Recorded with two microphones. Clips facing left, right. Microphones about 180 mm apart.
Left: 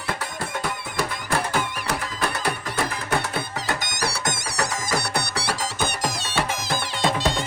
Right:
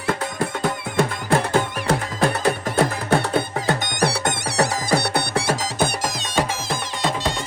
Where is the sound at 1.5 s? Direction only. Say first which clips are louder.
Right 6 dB; 50° right (ahead or behind).